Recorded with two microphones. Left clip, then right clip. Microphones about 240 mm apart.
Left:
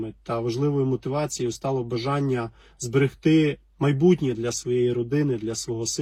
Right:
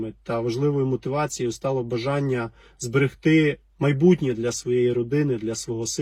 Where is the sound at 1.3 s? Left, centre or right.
Centre.